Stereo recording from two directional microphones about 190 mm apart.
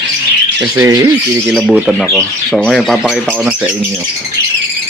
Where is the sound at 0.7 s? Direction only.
15° right (ahead or behind).